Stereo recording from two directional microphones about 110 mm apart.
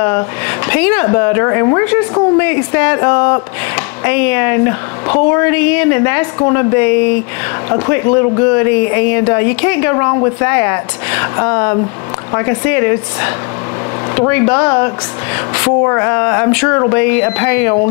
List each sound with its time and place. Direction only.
0.7 s a woman's voice: 20° left (ahead or behind)